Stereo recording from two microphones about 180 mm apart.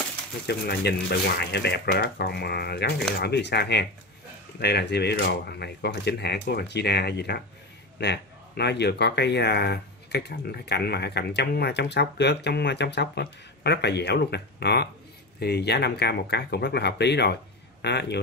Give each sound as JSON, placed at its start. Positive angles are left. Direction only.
{"t": 0.5, "sound": "speech", "side_deg": 60}